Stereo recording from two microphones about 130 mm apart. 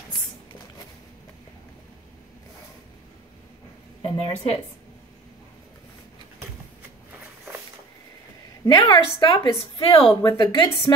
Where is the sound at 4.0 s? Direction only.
50° left (ahead or behind).